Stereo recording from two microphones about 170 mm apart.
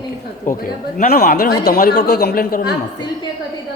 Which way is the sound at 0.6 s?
55° left (ahead or behind).